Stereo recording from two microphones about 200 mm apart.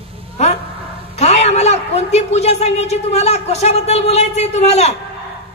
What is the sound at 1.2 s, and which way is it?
A man's voice, 35° left (ahead or behind).